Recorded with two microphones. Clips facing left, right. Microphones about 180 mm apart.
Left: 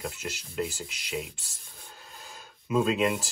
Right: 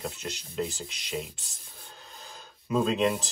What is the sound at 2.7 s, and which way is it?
Speech, centre (ahead or behind).